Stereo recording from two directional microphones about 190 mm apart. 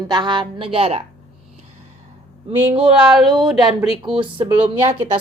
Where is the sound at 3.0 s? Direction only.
5° right (ahead or behind).